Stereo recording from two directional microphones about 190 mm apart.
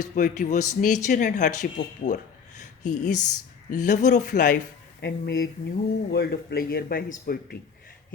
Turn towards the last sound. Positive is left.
turn(degrees=50)  # may be behind; listen again after turning